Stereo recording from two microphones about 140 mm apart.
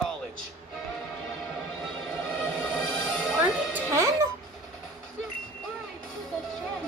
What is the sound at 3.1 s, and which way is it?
Music, 5° left (ahead or behind).